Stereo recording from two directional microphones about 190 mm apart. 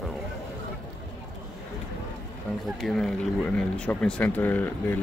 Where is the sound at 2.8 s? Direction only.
Centre (ahead or behind).